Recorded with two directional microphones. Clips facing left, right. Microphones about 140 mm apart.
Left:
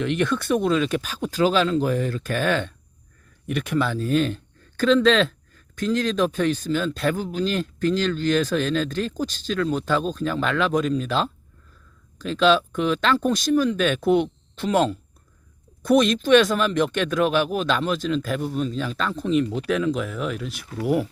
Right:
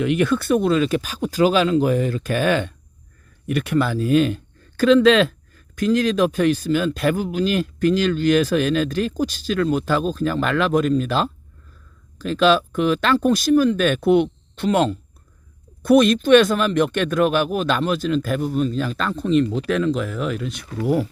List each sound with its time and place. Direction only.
0.0 s speech: 5° right (ahead or behind)